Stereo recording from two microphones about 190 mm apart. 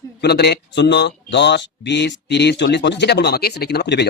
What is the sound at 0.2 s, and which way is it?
Speech, 60° left (ahead or behind).